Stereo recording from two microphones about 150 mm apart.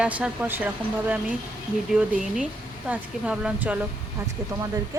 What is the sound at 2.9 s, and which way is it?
Speech, 5° right (ahead or behind).